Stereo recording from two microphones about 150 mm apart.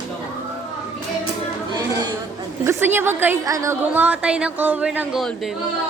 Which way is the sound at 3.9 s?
10° right (ahead or behind).